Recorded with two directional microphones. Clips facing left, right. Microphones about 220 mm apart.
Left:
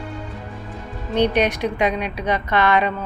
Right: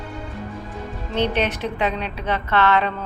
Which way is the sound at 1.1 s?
15° left (ahead or behind).